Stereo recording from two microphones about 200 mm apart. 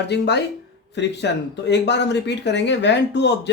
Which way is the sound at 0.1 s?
60° left (ahead or behind).